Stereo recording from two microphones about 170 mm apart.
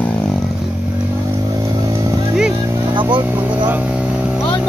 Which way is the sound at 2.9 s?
30° right (ahead or behind).